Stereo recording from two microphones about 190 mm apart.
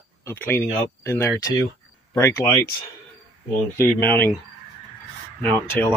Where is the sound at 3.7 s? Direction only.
10° left (ahead or behind).